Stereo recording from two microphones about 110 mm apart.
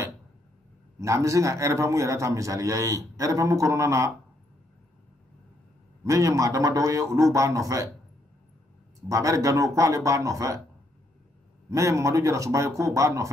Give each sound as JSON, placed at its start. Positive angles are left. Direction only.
{"t": 0.9, "sound": "a man's voice", "side_deg": -30}
{"t": 6.0, "sound": "a man's voice", "side_deg": -30}
{"t": 9.1, "sound": "a man's voice", "side_deg": -30}
{"t": 11.7, "sound": "a man's voice", "side_deg": -30}